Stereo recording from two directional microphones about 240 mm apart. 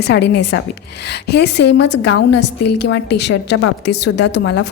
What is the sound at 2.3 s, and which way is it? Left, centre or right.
Speech, left.